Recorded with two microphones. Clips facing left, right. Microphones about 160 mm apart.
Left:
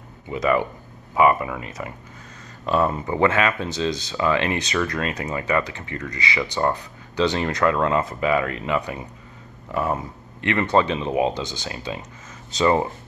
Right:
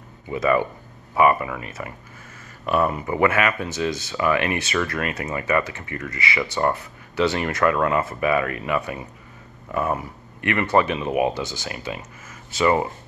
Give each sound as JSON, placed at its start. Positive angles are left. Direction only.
{"t": 0.3, "sound": "speech", "side_deg": 20}